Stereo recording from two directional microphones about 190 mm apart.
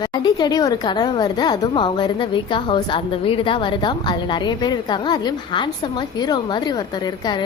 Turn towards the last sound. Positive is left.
turn(degrees=20)  # may be behind; listen again after turning